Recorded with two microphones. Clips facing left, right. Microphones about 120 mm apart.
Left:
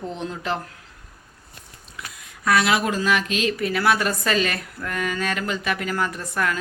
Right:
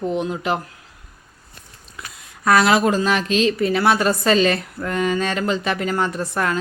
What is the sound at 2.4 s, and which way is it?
A woman's voice, 40° right (ahead or behind).